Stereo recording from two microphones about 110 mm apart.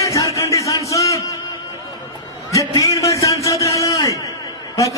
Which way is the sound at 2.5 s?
30° left (ahead or behind).